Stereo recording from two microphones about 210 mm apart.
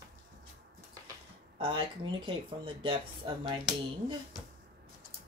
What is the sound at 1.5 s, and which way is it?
Speech, 25° right (ahead or behind).